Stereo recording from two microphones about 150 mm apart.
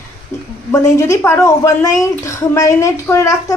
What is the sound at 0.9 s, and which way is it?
A woman's voice, 20° left (ahead or behind).